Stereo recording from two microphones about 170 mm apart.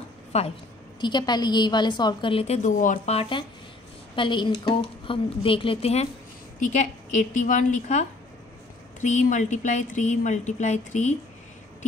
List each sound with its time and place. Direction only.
0.3 s a woman's voice: 40° left (ahead or behind)
1.0 s a woman's voice: 25° left (ahead or behind); by 3.2 s 50° left (ahead or behind)
3.2 s a woman's voice: 30° left (ahead or behind)